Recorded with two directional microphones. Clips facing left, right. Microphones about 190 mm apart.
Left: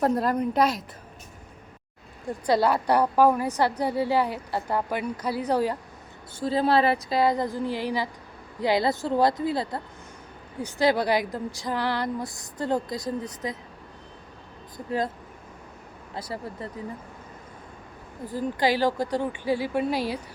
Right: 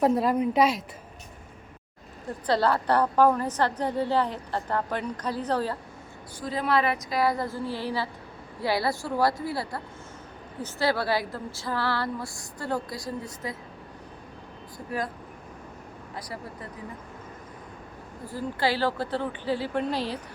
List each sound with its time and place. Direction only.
0.0 s a woman's voice: 5° right (ahead or behind)
2.5 s a woman's voice: 10° left (ahead or behind)
6.4 s a woman's voice: 30° left (ahead or behind)
14.8 s a woman's voice: 25° left (ahead or behind)
16.1 s a woman's voice: 30° left (ahead or behind)
18.3 s a woman's voice: 15° left (ahead or behind)